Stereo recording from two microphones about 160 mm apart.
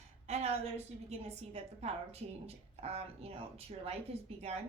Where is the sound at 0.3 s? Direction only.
40° right (ahead or behind).